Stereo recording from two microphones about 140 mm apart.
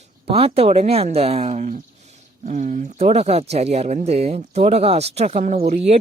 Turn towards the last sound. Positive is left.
turn(degrees=-55)  # may be behind; listen again after turning